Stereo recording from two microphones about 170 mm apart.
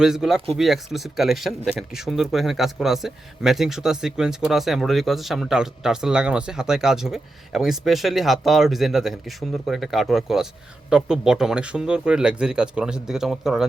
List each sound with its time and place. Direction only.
0.0 s speech: 5° right (ahead or behind)